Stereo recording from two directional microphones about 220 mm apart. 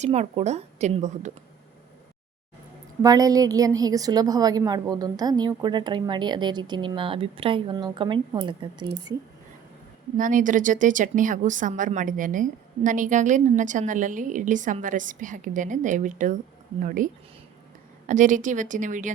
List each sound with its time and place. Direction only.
0.0 s speech: 30° right (ahead or behind)
3.0 s a woman's voice: 15° right (ahead or behind)
10.2 s speech: 35° right (ahead or behind)